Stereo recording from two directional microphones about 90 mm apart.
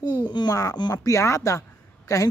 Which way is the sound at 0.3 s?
55° left (ahead or behind).